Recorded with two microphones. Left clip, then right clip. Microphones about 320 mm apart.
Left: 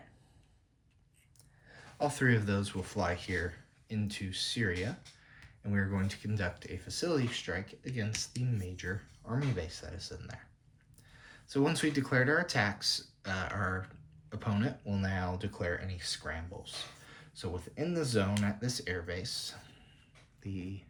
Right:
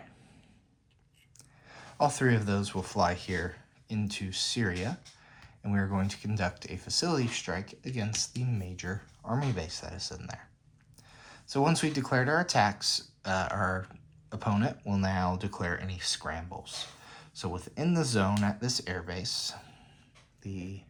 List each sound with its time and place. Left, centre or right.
1.7 s speech: centre